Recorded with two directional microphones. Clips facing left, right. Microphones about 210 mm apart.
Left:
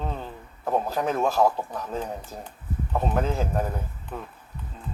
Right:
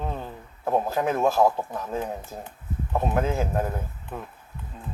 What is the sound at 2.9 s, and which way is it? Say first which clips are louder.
Speech: right 1 dB; 15° right (ahead or behind).